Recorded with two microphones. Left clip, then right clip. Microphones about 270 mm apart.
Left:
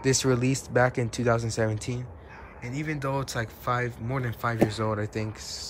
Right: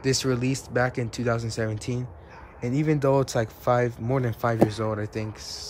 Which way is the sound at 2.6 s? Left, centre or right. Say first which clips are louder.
Right 8 dB; centre.